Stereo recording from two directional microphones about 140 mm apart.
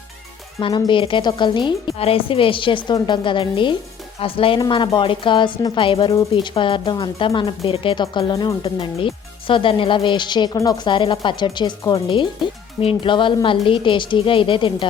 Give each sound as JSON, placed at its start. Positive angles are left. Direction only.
{"t": 0.6, "sound": "speech", "side_deg": 35}
{"t": 8.3, "sound": "speech", "side_deg": 30}
{"t": 8.6, "sound": "speech", "side_deg": 40}